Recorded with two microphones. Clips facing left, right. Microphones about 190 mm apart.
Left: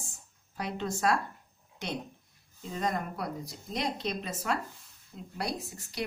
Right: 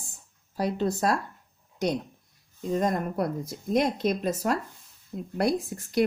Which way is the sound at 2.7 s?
45° right (ahead or behind).